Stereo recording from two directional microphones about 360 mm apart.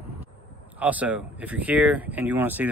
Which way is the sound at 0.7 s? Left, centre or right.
Centre.